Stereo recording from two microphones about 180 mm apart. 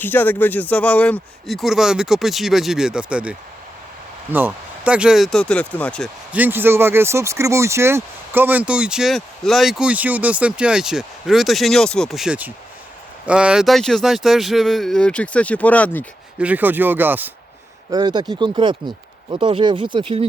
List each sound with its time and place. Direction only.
0.0 s speech: 10° left (ahead or behind)
6.3 s speech: 10° right (ahead or behind); by 16.0 s 10° left (ahead or behind)
16.4 s speech: 10° right (ahead or behind)
17.9 s speech: 25° right (ahead or behind)